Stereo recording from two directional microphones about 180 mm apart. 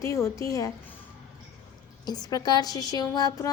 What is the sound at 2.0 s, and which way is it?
A woman's voice, 20° left (ahead or behind).